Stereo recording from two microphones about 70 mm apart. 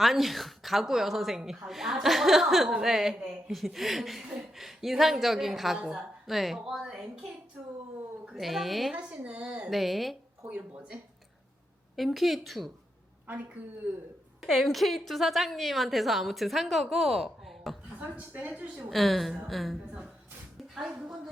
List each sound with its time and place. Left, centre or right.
0.0 s a woman's voice: centre
8.4 s a woman's voice: centre
9.6 s a woman's voice: centre
11.9 s a woman's voice: centre
13.8 s a woman's voice: centre
14.4 s a woman's voice: centre
18.2 s a woman's voice: right
18.9 s a woman's voice: centre